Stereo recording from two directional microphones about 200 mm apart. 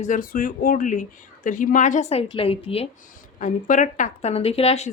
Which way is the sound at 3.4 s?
40° left (ahead or behind).